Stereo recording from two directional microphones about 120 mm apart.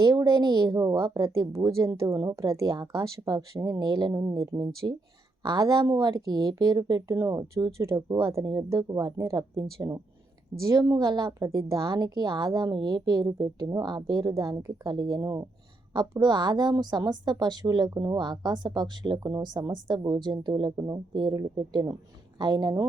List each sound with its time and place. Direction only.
0.0 s a woman's voice: 35° right (ahead or behind)